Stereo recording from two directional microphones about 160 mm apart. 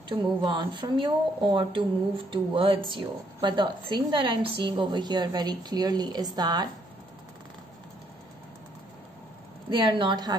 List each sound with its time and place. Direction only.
0.1 s a woman's voice: 30° right (ahead or behind)
9.7 s a woman's voice: 30° right (ahead or behind)